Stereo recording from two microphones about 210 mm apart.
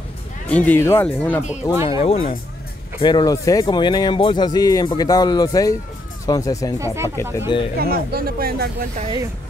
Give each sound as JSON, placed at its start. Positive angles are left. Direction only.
{"t": 0.5, "sound": "speech", "side_deg": 5}
{"t": 1.4, "sound": "speech", "side_deg": 35}
{"t": 7.8, "sound": "speech", "side_deg": -45}
{"t": 8.9, "sound": "speech", "side_deg": -30}